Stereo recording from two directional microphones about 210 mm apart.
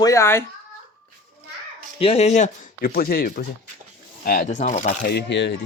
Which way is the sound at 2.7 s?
45° left (ahead or behind).